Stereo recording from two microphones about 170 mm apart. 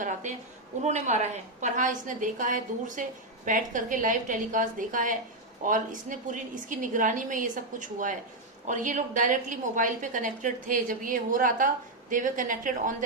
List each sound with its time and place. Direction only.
0.0 s a woman's voice: 45° right (ahead or behind)